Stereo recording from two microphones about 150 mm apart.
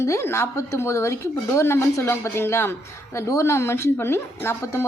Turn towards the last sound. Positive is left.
turn(degrees=15)  # may be behind; listen again after turning